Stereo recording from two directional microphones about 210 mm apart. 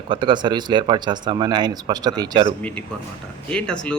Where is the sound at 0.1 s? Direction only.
20° right (ahead or behind).